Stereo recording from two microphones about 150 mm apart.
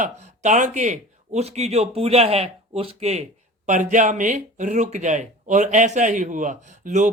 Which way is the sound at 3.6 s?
55° right (ahead or behind).